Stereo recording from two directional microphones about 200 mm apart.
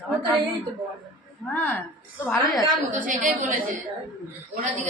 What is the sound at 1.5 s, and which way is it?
A woman's voice, 10° left (ahead or behind).